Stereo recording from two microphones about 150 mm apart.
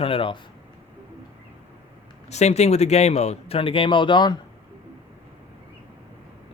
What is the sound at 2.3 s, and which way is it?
Speech, 45° left (ahead or behind).